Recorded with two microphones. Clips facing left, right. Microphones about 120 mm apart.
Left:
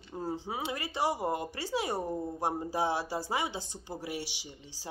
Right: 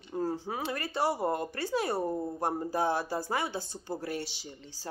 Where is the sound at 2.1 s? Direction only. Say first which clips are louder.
Right 2 dB; 5° right (ahead or behind).